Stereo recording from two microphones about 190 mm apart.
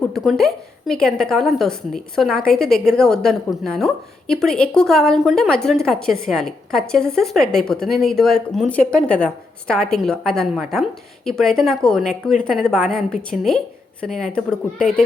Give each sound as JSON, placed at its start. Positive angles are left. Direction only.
{"t": 0.1, "sound": "a woman's voice", "side_deg": 0}